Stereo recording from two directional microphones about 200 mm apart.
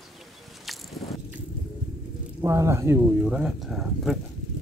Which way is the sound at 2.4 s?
15° right (ahead or behind).